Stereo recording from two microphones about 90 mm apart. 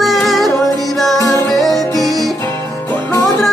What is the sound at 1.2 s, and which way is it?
Music, 40° left (ahead or behind).